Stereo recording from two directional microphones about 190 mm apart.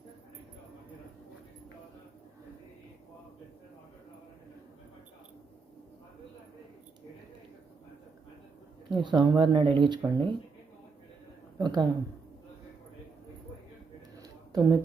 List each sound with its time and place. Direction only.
8.9 s speech: 25° right (ahead or behind)
11.5 s a woman's voice: 20° right (ahead or behind)
14.2 s a sound: 20° right (ahead or behind)